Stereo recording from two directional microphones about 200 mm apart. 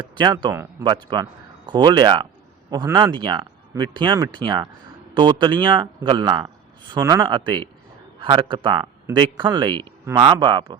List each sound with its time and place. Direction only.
0.0 s speech: 20° right (ahead or behind)